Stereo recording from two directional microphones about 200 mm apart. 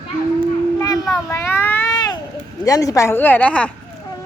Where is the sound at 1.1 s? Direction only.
10° left (ahead or behind).